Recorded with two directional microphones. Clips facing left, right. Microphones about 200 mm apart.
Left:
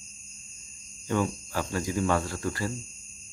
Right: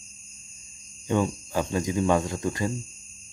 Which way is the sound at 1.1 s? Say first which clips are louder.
Right 3 dB; 20° right (ahead or behind).